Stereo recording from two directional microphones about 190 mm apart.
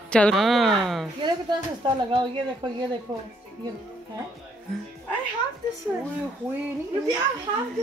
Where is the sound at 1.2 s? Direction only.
25° right (ahead or behind).